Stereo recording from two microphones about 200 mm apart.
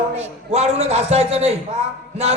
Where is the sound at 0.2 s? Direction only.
30° right (ahead or behind).